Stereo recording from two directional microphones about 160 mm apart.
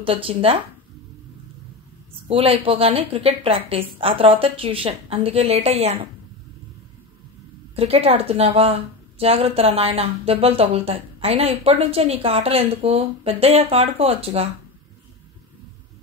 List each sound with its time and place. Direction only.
0.0 s speech: 35° right (ahead or behind)
2.2 s speech: 35° right (ahead or behind)
7.7 s speech: 40° right (ahead or behind)